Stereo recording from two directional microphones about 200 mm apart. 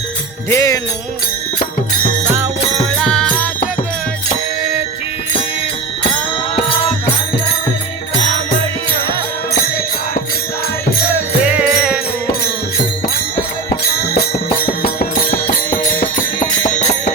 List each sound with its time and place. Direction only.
0.5 s music: 15° left (ahead or behind)
3.0 s music: centre (ahead or behind)
11.4 s music: 5° right (ahead or behind)
14.7 s music: 45° left (ahead or behind)